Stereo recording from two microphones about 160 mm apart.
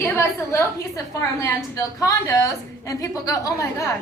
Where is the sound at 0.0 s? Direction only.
20° left (ahead or behind).